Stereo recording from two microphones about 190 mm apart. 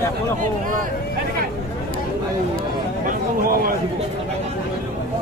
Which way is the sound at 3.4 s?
50° right (ahead or behind).